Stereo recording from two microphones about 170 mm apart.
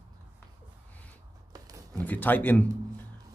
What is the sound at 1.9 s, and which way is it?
Speech, 10° left (ahead or behind).